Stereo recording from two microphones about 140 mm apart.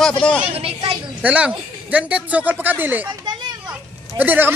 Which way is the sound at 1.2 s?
10° right (ahead or behind).